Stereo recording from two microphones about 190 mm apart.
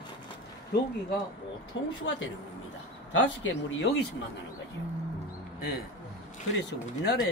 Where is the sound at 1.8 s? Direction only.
75° left (ahead or behind).